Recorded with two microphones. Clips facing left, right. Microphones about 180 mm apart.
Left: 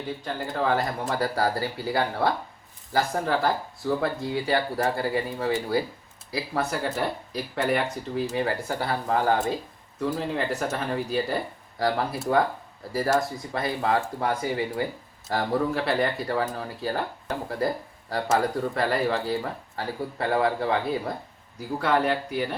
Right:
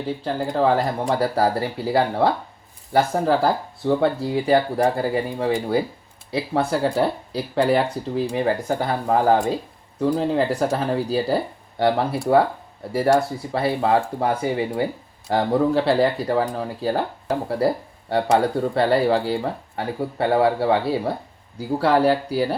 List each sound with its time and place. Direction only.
0.3 s speech: 30° right (ahead or behind)
4.8 s speech: 20° right (ahead or behind)
6.3 s speech: 30° right (ahead or behind)
9.0 s speech: 30° right (ahead or behind)